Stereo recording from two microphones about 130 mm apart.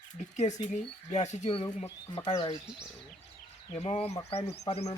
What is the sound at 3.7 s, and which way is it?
Speech, 50° left (ahead or behind).